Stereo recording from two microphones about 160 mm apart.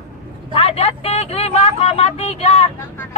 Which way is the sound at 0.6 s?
40° left (ahead or behind).